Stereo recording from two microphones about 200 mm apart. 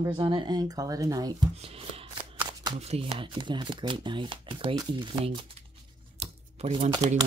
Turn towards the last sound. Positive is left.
turn(degrees=-20)  # may be behind; listen again after turning